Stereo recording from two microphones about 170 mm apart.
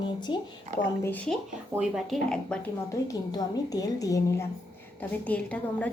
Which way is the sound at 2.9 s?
20° left (ahead or behind).